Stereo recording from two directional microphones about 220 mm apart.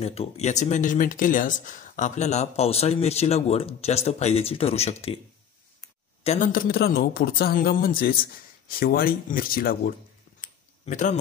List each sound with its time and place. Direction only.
0.0 s speech: 25° left (ahead or behind)
6.2 s a man's voice: 35° left (ahead or behind)
10.4 s a sound: 35° left (ahead or behind)